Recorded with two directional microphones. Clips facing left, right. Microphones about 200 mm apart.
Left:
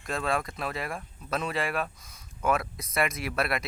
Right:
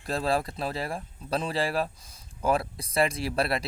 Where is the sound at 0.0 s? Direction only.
30° right (ahead or behind).